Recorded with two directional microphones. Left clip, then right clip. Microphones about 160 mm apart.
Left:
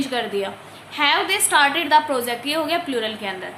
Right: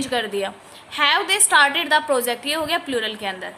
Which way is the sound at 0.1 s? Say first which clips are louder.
Right 1 dB; 45° right (ahead or behind).